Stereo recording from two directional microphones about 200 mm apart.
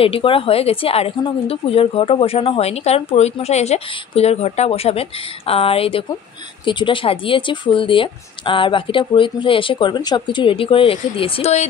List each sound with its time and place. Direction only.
0.0 s speech: 25° left (ahead or behind)